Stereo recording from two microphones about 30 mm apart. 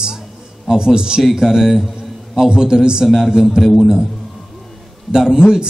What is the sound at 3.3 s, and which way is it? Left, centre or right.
Speech, centre.